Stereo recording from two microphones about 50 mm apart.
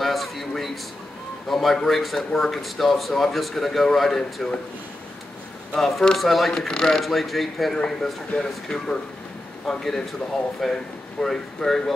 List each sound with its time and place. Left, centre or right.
0.0 s a man's voice: centre
5.8 s speech: centre
10.6 s speech: centre